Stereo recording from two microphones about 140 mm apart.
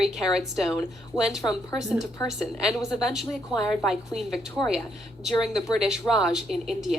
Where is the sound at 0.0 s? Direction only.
5° right (ahead or behind).